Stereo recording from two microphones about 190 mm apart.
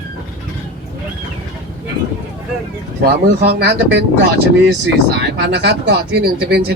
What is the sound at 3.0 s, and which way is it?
Speech, 55° right (ahead or behind).